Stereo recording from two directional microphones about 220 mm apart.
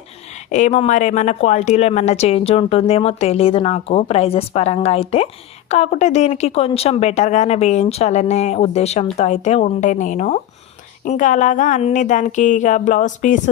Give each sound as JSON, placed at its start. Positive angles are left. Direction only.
{"t": 0.3, "sound": "speech", "side_deg": 35}